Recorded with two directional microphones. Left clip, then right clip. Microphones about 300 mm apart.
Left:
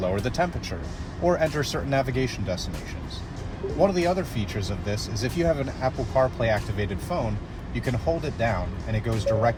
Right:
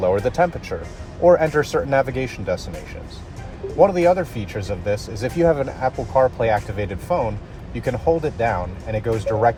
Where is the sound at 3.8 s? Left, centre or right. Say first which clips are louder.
Right 8 dB; right.